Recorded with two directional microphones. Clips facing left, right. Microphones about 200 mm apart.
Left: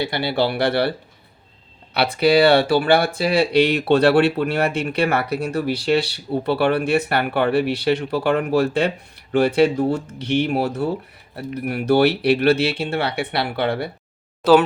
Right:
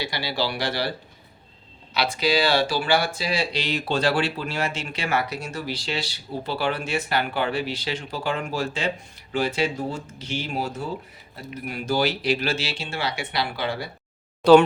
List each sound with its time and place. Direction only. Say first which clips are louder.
0.0 s speech: left 7 dB; 55° left (ahead or behind)
14.4 s speech: right 1 dB; 5° left (ahead or behind)